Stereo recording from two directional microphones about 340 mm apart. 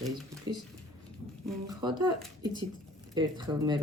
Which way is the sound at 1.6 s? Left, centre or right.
Centre.